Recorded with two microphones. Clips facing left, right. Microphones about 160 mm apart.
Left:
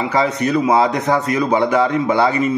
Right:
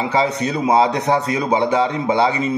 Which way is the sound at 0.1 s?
25° right (ahead or behind).